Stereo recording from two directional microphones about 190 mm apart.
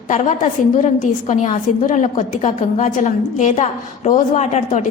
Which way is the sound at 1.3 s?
40° left (ahead or behind).